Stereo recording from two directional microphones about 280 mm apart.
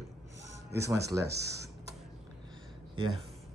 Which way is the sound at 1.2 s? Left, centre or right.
Right.